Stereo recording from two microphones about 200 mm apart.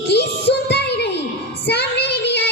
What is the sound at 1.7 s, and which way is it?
Child singing, 55° left (ahead or behind).